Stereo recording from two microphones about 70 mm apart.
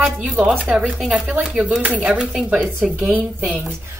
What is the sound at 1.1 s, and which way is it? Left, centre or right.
A woman's voice, right.